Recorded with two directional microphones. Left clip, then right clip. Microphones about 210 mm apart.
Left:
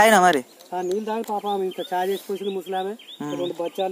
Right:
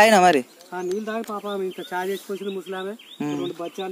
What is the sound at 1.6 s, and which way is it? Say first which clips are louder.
Speech: left 3 dB; 5° right (ahead or behind).